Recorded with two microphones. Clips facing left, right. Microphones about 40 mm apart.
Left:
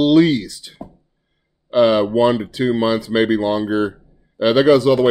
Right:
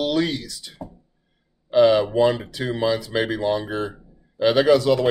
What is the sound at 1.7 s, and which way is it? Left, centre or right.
Speech, left.